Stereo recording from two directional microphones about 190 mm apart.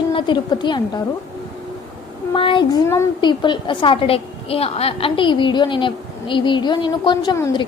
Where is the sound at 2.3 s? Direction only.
25° left (ahead or behind).